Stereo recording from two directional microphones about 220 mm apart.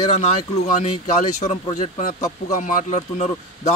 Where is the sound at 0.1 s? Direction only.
30° left (ahead or behind).